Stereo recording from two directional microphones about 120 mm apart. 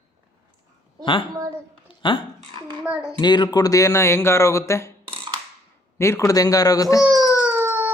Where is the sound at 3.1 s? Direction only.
35° left (ahead or behind).